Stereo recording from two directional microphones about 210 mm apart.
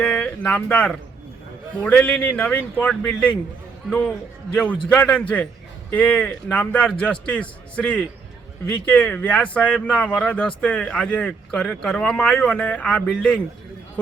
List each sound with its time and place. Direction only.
0.0 s speech: 5° left (ahead or behind)
4.5 s speech: 5° left (ahead or behind)